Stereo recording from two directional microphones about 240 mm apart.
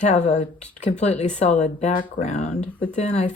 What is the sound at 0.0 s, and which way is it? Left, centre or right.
Speech, left.